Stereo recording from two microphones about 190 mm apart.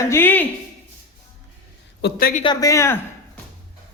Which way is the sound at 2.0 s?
55° left (ahead or behind).